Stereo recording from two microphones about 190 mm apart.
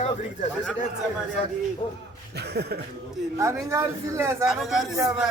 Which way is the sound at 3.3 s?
15° right (ahead or behind).